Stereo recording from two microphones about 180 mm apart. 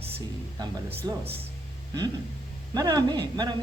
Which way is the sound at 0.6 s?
25° right (ahead or behind).